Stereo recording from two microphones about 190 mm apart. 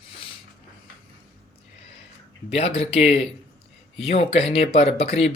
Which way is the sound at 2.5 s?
30° left (ahead or behind).